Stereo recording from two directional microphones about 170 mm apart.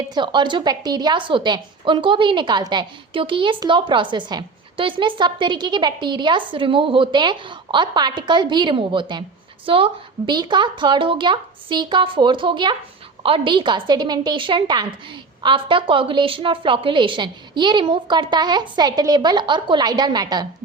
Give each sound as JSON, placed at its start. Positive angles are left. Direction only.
{"t": 0.1, "sound": "a woman's voice", "side_deg": -25}